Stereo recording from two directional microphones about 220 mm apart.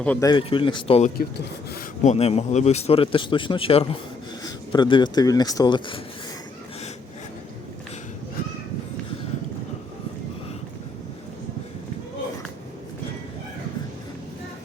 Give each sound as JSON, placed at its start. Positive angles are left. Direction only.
{"t": 0.0, "sound": "speech", "side_deg": 5}
{"t": 0.3, "sound": "speech", "side_deg": 20}